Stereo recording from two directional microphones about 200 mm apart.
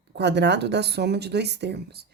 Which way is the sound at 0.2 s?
60° right (ahead or behind).